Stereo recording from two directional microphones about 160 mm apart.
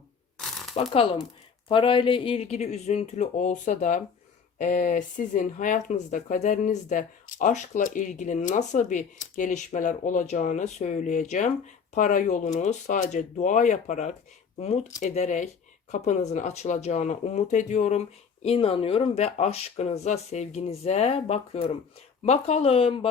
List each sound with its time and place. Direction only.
0.3 s shuffling cards: centre (ahead or behind)
0.8 s speech: 35° left (ahead or behind)
18.4 s speech: 35° left (ahead or behind)